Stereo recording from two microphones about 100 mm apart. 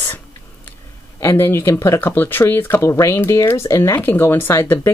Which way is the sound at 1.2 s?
25° left (ahead or behind).